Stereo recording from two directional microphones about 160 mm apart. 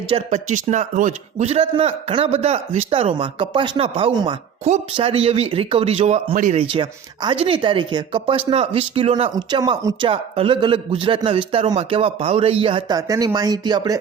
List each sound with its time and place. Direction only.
0.3 s a man's voice: 50° right (ahead or behind)
6.3 s speech: 55° right (ahead or behind)
6.6 s a man's voice: 30° right (ahead or behind)
9.3 s a man's voice: 25° right (ahead or behind)
13.0 s speech: 20° right (ahead or behind)